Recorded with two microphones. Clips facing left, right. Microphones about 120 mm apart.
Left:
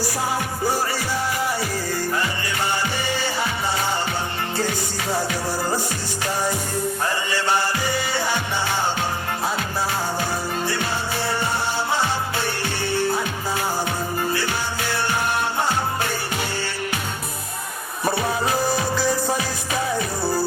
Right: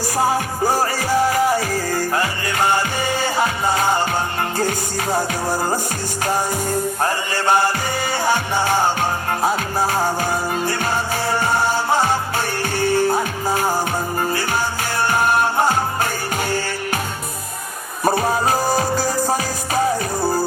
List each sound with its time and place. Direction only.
0.0 s music: 45° right (ahead or behind)
7.0 s music: 45° right (ahead or behind)
18.0 s music: 45° right (ahead or behind)